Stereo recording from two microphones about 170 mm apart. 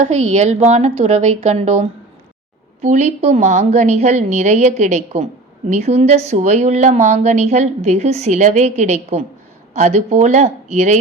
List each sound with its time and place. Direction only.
0.0 s a woman's voice: 40° right (ahead or behind)